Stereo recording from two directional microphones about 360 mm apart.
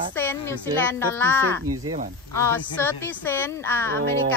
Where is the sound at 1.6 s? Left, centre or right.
Right.